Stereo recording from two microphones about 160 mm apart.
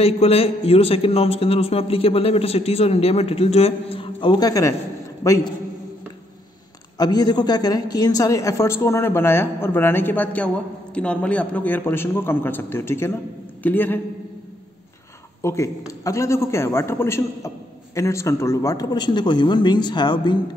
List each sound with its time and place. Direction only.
0.0 s a man's voice: 40° left (ahead or behind); by 5.5 s 20° left (ahead or behind)
7.0 s a woman's voice: 25° left (ahead or behind)
15.4 s a woman's voice: 20° left (ahead or behind)